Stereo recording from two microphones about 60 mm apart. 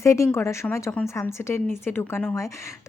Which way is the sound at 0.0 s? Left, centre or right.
Left.